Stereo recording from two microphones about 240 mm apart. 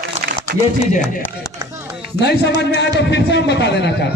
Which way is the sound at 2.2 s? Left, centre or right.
Left.